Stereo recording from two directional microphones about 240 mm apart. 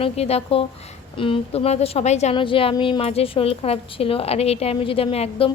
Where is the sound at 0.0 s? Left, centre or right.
Left.